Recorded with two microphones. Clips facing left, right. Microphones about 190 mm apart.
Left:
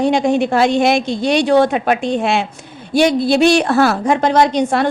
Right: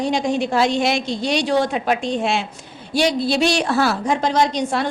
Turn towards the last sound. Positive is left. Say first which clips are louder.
# left 5 dB
turn(degrees=60)  # may be behind; listen again after turning